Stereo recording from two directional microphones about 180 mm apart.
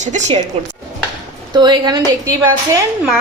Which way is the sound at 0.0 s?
40° right (ahead or behind).